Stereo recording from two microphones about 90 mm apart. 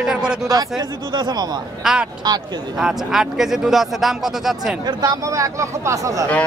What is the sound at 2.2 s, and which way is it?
Speech, 50° right (ahead or behind).